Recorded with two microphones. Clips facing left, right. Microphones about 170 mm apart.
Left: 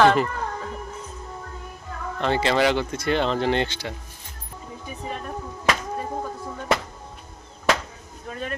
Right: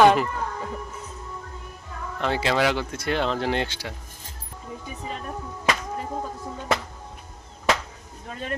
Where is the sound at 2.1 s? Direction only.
5° right (ahead or behind).